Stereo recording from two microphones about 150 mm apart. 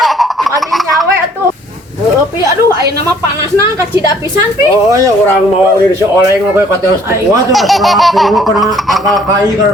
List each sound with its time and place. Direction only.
6.1 s a man's voice: 20° right (ahead or behind)
7.5 s speech: centre (ahead or behind)